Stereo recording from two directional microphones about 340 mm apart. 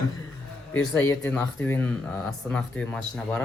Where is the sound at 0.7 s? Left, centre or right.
Centre.